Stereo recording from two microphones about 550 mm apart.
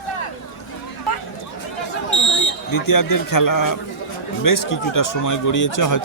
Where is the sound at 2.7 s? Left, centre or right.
Left.